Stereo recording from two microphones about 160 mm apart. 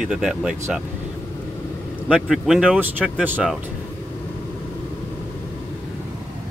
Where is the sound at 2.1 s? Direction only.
Centre (ahead or behind).